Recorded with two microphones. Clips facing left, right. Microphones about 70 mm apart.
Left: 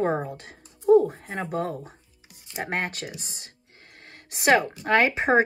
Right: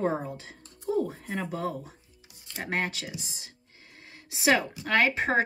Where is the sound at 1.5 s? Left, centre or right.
Left.